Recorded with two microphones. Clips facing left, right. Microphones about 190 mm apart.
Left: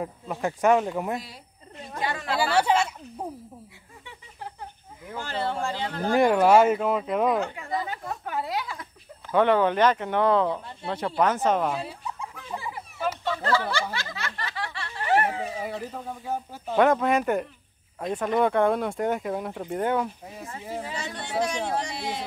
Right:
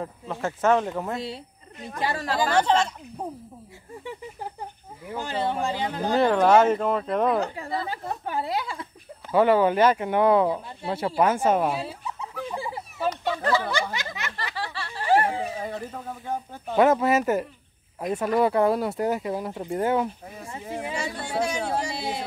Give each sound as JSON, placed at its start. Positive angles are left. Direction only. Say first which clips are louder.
{"t": 0.0, "sound": "speech", "louder": "left 1 dB", "side_deg": 15}
{"t": 2.0, "sound": "a woman's voice", "louder": "right 2 dB", "side_deg": -35}
{"t": 2.5, "sound": "speech", "louder": "right 1 dB", "side_deg": 10}
{"t": 5.1, "sound": "speech", "louder": "right 2 dB", "side_deg": -15}
{"t": 6.1, "sound": "speech", "louder": "even", "side_deg": 10}
{"t": 7.3, "sound": "a woman's voice", "louder": "right 1 dB", "side_deg": -35}
{"t": 9.3, "sound": "speech", "louder": "right 2 dB", "side_deg": -5}
{"t": 12.5, "sound": "a sound", "louder": "left 2 dB", "side_deg": -30}
{"t": 13.2, "sound": "speech", "louder": "even", "side_deg": -15}
{"t": 13.9, "sound": "snicker", "louder": "right 1 dB", "side_deg": -15}
{"t": 14.5, "sound": "snicker", "louder": "right 2 dB", "side_deg": -35}
{"t": 15.5, "sound": "speech", "louder": "even", "side_deg": 5}